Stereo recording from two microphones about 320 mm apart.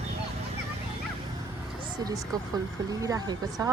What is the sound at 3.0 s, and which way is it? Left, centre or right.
Speech, centre.